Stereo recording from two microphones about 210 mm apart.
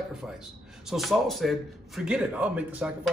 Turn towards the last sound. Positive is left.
turn(degrees=-5)  # may be behind; listen again after turning